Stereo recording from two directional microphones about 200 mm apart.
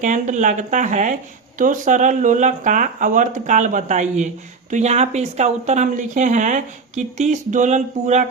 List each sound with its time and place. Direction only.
0.0 s speech: 40° right (ahead or behind)